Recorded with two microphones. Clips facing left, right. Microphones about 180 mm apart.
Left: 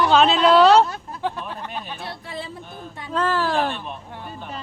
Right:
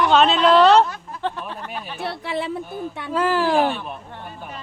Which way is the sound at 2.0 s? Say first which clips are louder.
Right 7 dB; 70° right (ahead or behind).